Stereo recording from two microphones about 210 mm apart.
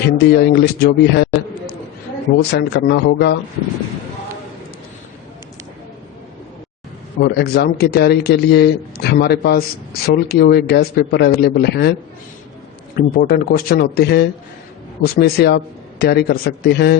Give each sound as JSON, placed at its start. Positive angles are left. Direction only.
{"t": 0.0, "sound": "a man's voice", "side_deg": 50}
{"t": 7.2, "sound": "a man's voice", "side_deg": 50}
{"t": 13.0, "sound": "a man's voice", "side_deg": 45}